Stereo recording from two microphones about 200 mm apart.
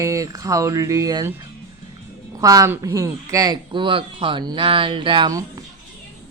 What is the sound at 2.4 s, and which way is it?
Speech, 15° right (ahead or behind).